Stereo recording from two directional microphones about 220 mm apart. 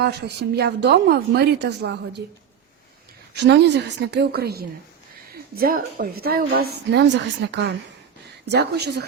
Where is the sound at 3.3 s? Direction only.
50° right (ahead or behind).